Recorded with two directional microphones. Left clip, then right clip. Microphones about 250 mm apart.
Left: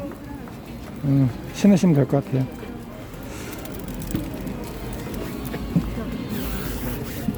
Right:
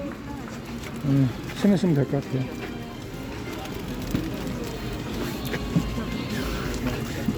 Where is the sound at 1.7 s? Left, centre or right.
Centre.